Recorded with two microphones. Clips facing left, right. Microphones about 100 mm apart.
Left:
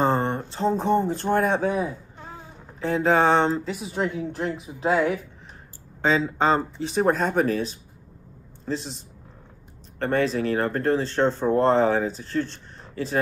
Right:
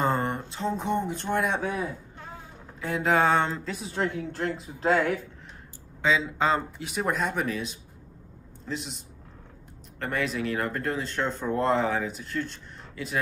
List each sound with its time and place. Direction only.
0.0 s a sound: 30° left (ahead or behind)
0.4 s speech: 35° left (ahead or behind)
2.8 s speech: 30° left (ahead or behind); by 5.2 s 15° left (ahead or behind)
6.0 s a man's voice: 40° left (ahead or behind)
9.9 s speech: 35° left (ahead or behind)